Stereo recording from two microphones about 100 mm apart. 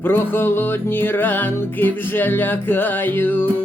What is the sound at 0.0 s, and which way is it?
Music, 20° left (ahead or behind).